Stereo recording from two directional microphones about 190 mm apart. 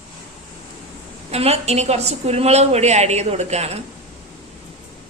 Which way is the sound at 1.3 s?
35° right (ahead or behind).